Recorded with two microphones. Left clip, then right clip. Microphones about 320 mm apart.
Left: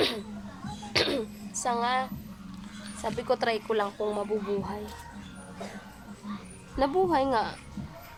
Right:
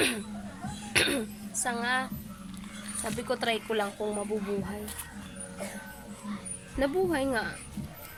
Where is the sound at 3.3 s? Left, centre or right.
Centre.